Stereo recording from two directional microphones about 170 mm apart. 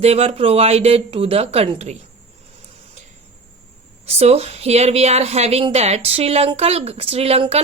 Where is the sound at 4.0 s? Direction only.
40° right (ahead or behind).